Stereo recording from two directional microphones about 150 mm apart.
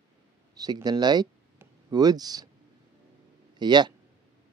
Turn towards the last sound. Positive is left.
turn(degrees=-30)  # may be behind; listen again after turning